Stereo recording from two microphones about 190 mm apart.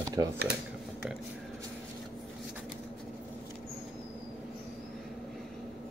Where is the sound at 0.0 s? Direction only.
20° right (ahead or behind).